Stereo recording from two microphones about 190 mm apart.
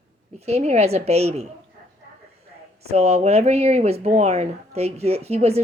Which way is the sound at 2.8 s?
35° right (ahead or behind).